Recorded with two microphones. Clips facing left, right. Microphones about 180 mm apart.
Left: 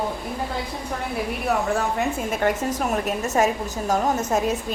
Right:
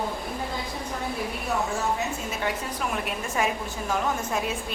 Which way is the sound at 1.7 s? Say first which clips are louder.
Left 5 dB; 55° left (ahead or behind).